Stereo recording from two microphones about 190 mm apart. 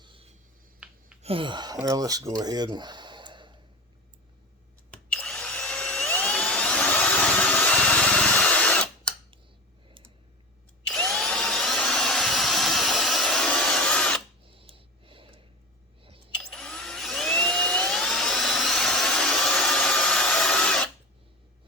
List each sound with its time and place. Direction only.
0.0 s finger snapping: 25° right (ahead or behind)
0.8 s a sound: 5° right (ahead or behind)
1.2 s speech: 30° right (ahead or behind)
5.0 s vacuum cleaner: 5° left (ahead or behind)
10.8 s drill: 5° left (ahead or behind)
14.5 s a sound: 30° right (ahead or behind)
16.5 s vacuum cleaner: 5° left (ahead or behind)